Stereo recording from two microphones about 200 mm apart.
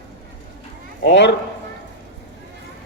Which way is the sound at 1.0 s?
60° left (ahead or behind).